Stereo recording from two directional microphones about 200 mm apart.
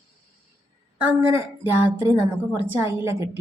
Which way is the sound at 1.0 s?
10° right (ahead or behind).